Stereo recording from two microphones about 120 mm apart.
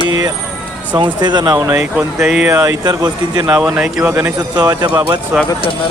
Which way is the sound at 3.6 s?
5° right (ahead or behind).